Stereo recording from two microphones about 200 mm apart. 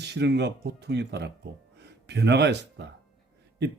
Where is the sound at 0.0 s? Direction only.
60° right (ahead or behind).